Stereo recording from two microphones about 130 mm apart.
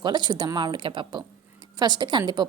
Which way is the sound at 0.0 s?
35° right (ahead or behind).